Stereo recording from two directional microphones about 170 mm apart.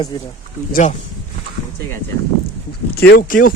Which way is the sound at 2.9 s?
65° left (ahead or behind).